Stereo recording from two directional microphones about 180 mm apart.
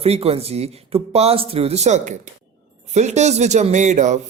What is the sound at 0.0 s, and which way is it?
A man's voice, 35° right (ahead or behind).